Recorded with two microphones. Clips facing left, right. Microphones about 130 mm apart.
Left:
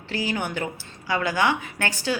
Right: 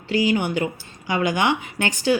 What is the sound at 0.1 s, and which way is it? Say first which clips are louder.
A woman's voice: right 7 dB; 15° right (ahead or behind).